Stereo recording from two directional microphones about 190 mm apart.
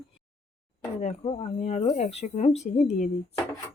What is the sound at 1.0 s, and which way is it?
Speech, 30° left (ahead or behind).